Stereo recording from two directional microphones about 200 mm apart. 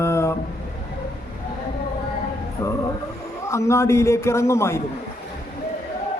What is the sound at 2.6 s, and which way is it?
A man's voice, 15° left (ahead or behind).